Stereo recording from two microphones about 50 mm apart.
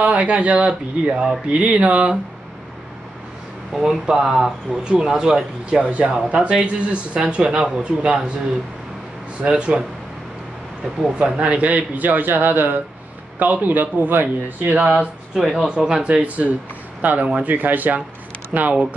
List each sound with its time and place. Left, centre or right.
0.0 s speech: right
3.7 s speech: centre
5.9 s speech: right
9.4 s speech: right
11.1 s speech: right
17.0 s speech: right